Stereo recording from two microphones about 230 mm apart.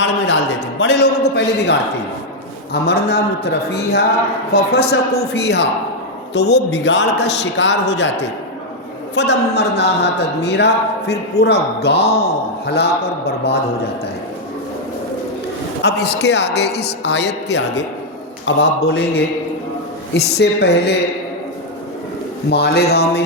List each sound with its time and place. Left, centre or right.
0.8 s speech: left
2.8 s speech: left
15.8 s speech: left
22.4 s speech: left